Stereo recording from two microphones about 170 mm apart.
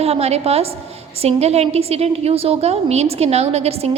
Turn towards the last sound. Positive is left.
turn(degrees=-35)  # may be behind; listen again after turning